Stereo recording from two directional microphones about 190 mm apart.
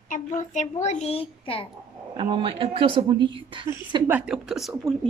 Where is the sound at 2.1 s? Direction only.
25° right (ahead or behind).